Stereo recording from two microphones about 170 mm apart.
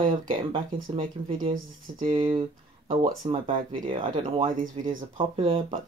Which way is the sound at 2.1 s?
30° right (ahead or behind).